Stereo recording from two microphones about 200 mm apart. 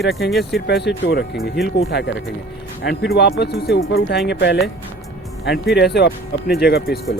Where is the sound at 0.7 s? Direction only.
55° left (ahead or behind).